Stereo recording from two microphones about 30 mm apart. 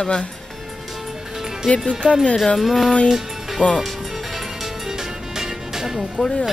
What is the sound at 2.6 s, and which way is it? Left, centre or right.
Speech, centre.